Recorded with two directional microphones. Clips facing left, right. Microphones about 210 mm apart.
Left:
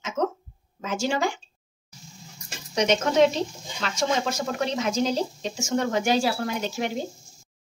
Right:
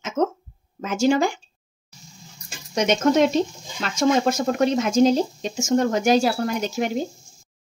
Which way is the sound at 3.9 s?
45° right (ahead or behind).